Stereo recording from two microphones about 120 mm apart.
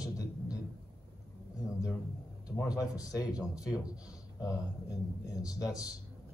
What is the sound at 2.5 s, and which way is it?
Speech, 25° left (ahead or behind).